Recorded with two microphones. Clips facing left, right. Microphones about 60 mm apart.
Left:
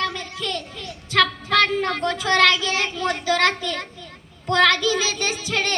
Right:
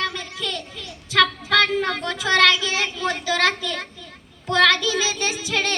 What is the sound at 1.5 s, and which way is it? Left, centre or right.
Child singing, left.